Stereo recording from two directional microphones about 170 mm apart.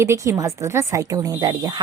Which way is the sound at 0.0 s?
15° right (ahead or behind).